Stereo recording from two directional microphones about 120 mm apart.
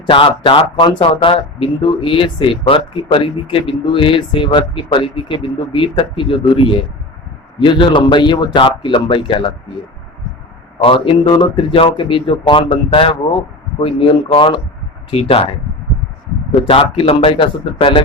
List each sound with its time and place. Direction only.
0.1 s speech: 45° left (ahead or behind)
10.8 s speech: 50° left (ahead or behind)
16.6 s speech: 50° left (ahead or behind)